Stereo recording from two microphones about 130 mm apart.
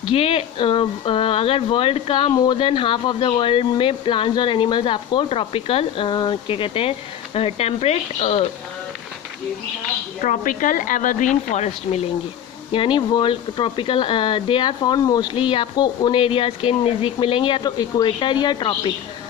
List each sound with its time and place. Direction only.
0.1 s speech: 50° left (ahead or behind)
10.2 s speech: 85° left; by 12.0 s 60° left (ahead or behind)
12.7 s speech: 40° left (ahead or behind)